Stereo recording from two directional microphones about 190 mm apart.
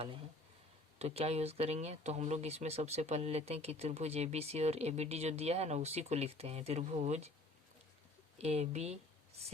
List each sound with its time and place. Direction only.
0.9 s speech: 35° right (ahead or behind)
8.4 s speech: 35° right (ahead or behind)